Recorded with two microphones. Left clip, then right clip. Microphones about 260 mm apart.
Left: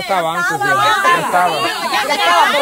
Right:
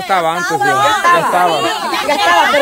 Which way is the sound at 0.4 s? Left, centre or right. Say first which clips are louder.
Right 2 dB; right.